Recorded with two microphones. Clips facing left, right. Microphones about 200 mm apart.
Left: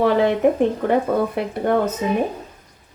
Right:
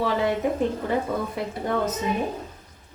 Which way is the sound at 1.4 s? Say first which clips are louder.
Left 7 dB; 60° left (ahead or behind).